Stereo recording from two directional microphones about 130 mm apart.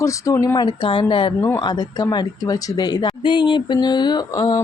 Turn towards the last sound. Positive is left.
turn(degrees=30)  # may be behind; listen again after turning